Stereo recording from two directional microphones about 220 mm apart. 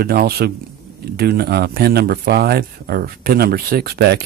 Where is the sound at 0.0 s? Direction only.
45° right (ahead or behind).